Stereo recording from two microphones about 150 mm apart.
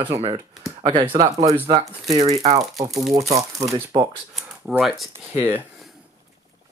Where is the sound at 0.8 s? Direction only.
30° right (ahead or behind).